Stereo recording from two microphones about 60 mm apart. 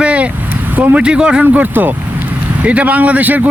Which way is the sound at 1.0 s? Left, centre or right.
Centre.